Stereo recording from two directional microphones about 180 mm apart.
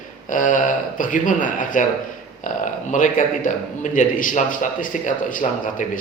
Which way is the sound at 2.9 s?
45° left (ahead or behind).